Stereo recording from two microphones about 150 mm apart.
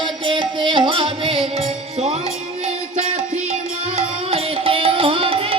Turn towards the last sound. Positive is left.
turn(degrees=-35)  # may be behind; listen again after turning